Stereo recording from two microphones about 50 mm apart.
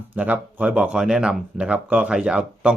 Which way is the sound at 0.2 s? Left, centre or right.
Right.